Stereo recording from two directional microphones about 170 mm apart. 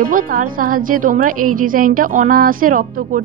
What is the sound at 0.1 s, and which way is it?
A woman's voice, 55° right (ahead or behind).